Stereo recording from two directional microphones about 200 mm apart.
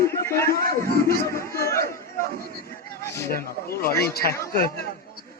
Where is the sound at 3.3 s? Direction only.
50° left (ahead or behind).